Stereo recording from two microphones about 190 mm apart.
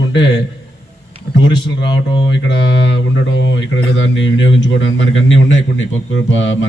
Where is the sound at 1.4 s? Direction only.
70° left (ahead or behind).